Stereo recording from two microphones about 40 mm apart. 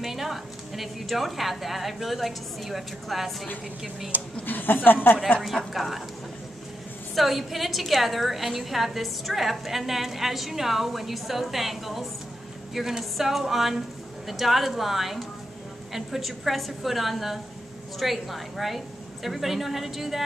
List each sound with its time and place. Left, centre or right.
0.0 s a woman's voice: centre
4.1 s a woman's voice: right
4.5 s a woman's voice: left
5.4 s a woman's voice: centre
7.2 s a woman's voice: centre